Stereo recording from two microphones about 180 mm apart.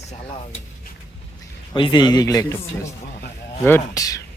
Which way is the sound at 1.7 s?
25° left (ahead or behind).